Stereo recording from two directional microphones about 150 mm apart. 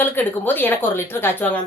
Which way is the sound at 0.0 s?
15° left (ahead or behind).